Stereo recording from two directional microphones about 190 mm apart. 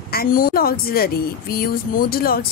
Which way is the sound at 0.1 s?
50° left (ahead or behind).